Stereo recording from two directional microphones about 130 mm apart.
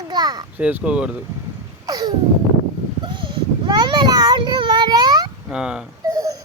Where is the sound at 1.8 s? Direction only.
30° right (ahead or behind).